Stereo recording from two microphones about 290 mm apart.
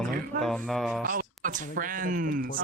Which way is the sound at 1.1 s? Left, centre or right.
Right.